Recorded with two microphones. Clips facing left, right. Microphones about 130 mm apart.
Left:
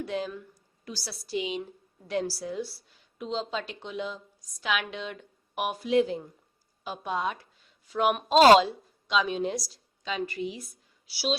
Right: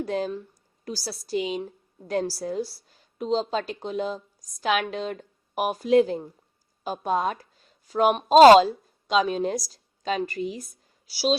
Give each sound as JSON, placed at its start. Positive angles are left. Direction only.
{"t": 0.0, "sound": "a woman's voice", "side_deg": -40}